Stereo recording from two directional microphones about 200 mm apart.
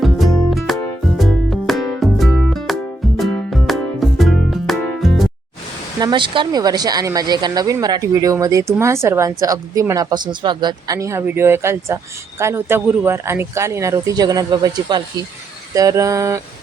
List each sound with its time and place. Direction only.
0.0 s music: centre (ahead or behind)
6.0 s speech: 20° right (ahead or behind)